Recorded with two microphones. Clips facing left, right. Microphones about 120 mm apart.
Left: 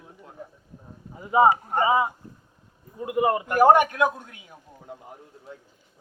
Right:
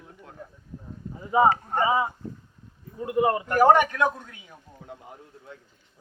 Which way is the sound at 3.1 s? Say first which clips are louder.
Even; 15° left (ahead or behind).